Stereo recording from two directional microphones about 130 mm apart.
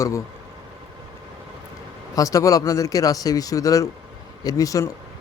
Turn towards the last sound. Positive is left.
turn(degrees=25)  # may be behind; listen again after turning